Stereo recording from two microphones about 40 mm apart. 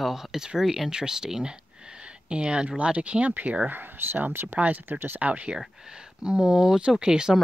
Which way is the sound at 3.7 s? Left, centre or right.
Right.